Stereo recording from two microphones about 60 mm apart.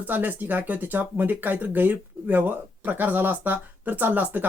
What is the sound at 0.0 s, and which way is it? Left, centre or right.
Speech, right.